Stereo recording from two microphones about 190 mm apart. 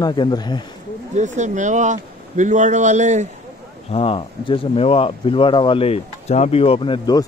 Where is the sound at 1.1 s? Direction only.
40° right (ahead or behind).